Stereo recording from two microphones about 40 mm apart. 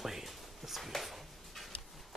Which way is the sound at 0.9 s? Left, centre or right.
Centre.